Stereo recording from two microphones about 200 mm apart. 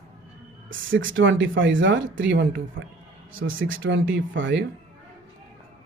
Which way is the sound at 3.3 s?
80° right.